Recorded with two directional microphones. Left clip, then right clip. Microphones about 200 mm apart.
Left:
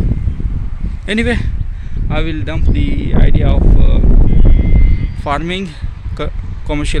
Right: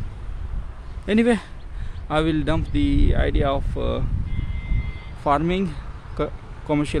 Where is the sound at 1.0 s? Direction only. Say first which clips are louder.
Left 3 dB; 5° right (ahead or behind).